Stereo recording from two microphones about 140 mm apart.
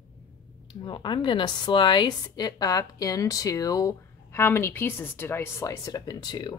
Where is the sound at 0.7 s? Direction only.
35° left (ahead or behind).